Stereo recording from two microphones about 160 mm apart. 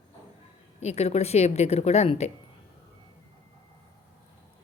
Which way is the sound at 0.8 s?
40° left (ahead or behind).